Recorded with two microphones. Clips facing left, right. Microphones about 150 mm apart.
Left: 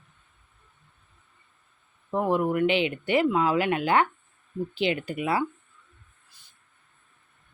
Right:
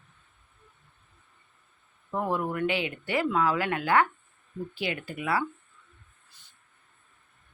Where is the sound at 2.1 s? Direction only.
20° left (ahead or behind).